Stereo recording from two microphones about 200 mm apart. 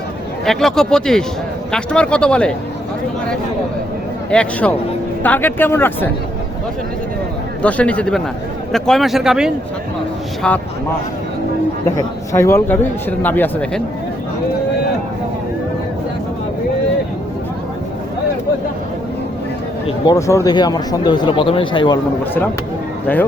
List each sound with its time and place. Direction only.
0.4 s speech: centre (ahead or behind)
4.3 s speech: 5° left (ahead or behind)
7.6 s speech: 5° left (ahead or behind)
12.3 s speech: 15° left (ahead or behind)
20.1 s speech: 15° left (ahead or behind)
23.1 s speech: 5° left (ahead or behind)